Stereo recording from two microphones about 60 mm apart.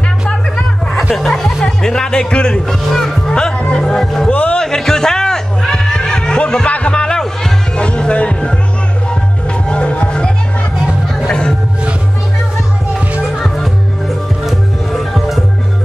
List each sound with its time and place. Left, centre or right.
1.1 s speech: centre
4.3 s speech: left
4.6 s a sound: centre
9.7 s music: centre
14.4 s music: centre